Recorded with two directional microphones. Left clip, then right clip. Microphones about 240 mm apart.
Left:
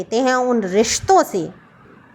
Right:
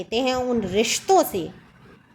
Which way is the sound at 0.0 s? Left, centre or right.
Centre.